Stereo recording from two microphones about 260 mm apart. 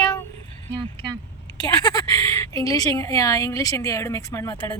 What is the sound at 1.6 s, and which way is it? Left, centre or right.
A woman's voice, centre.